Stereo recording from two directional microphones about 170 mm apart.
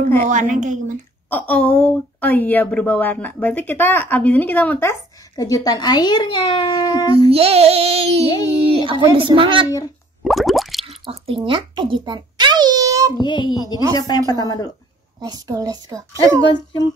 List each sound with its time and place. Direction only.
0.2 s a woman's voice: 45° right (ahead or behind)
1.5 s a woman's voice: 5° left (ahead or behind); by 7.2 s 25° left (ahead or behind)
7.2 s a sound: 35° right (ahead or behind)
10.2 s plop: centre (ahead or behind)
10.9 s a sound: 35° right (ahead or behind)
13.2 s a woman's voice: 25° left (ahead or behind)
15.1 s a child's voice: 25° right (ahead or behind)
16.4 s a woman's voice: 25° left (ahead or behind)